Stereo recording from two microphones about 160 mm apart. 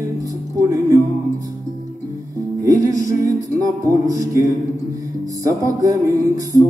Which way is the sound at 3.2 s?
20° right (ahead or behind).